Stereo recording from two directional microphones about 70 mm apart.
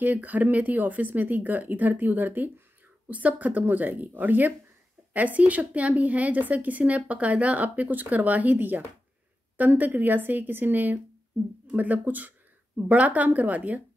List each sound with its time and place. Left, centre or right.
0.0 s a woman's voice: right